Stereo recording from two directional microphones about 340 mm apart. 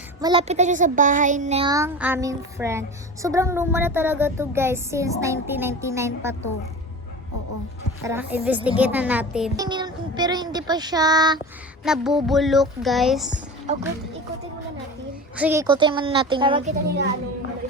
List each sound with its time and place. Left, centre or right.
0.2 s a child's voice: centre
8.0 s speech: centre
9.6 s child singing: centre
11.9 s speech: centre
13.7 s a woman's voice: right
15.4 s a child's voice: centre
16.8 s a woman's voice: right